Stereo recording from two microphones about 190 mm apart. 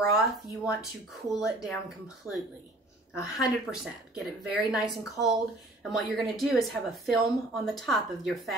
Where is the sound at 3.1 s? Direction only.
15° left (ahead or behind).